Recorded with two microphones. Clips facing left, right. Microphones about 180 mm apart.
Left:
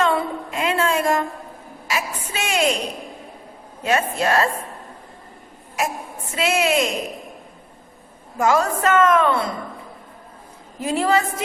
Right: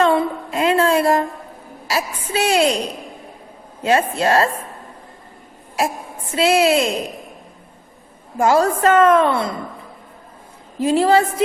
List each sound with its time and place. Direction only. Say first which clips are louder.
0.0 s a sound: right 4 dB; 35° right (ahead or behind)
1.9 s a woman's voice: right 4 dB; 35° right (ahead or behind)
3.8 s a woman's voice: right 3 dB; 30° right (ahead or behind)
6.3 s a woman's voice: right 5 dB; 30° right (ahead or behind)
8.4 s a woman's voice: right 4 dB; 30° right (ahead or behind)
10.8 s a woman's voice: right 5 dB; 30° right (ahead or behind)